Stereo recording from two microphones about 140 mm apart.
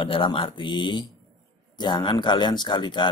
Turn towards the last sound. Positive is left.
turn(degrees=35)  # may be behind; listen again after turning